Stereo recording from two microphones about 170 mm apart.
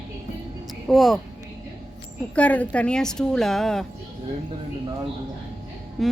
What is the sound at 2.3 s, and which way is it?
Speech, 10° left (ahead or behind).